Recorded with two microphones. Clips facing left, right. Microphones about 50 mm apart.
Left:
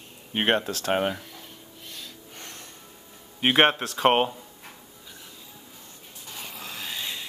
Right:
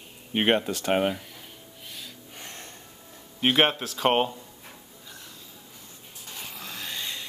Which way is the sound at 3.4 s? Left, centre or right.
Centre.